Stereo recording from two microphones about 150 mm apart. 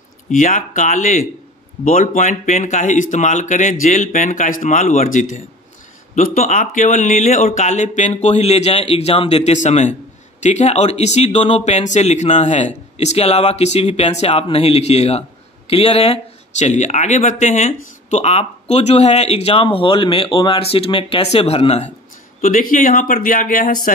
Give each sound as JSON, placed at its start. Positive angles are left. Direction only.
{"t": 0.3, "sound": "speech", "side_deg": 60}
{"t": 22.4, "sound": "speech", "side_deg": 65}